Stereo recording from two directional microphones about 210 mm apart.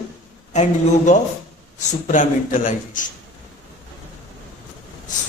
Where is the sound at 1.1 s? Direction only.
35° left (ahead or behind).